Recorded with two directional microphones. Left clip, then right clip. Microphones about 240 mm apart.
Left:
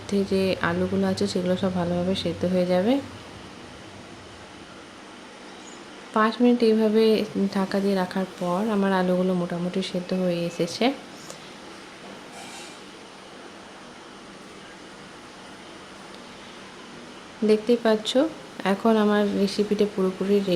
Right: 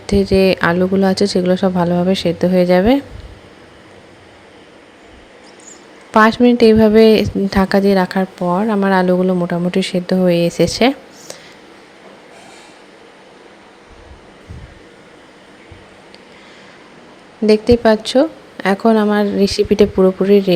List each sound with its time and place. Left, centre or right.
0.1 s a woman's voice: right
6.1 s a woman's voice: right
17.4 s a woman's voice: right